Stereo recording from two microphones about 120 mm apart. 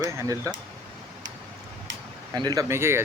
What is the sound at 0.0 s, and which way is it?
Speech, 25° right (ahead or behind).